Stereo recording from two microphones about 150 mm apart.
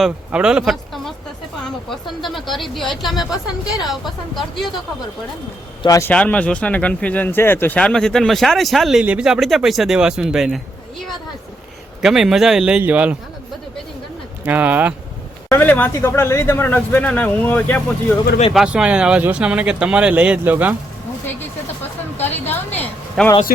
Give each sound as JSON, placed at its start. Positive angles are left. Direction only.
{"t": 0.0, "sound": "speech", "side_deg": -5}
{"t": 5.8, "sound": "a man's voice", "side_deg": 25}
{"t": 6.1, "sound": "speech", "side_deg": 10}
{"t": 12.0, "sound": "speech", "side_deg": -5}
{"t": 14.4, "sound": "speech", "side_deg": -10}
{"t": 15.4, "sound": "speech", "side_deg": 15}
{"t": 18.5, "sound": "speech", "side_deg": -5}
{"t": 22.2, "sound": "a sound", "side_deg": 10}